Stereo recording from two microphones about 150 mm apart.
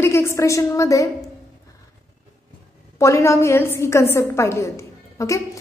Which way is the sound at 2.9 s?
20° left (ahead or behind).